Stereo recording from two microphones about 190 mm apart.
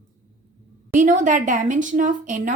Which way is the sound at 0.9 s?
45° right (ahead or behind).